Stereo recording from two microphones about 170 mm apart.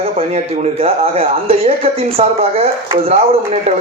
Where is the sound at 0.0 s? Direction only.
40° right (ahead or behind).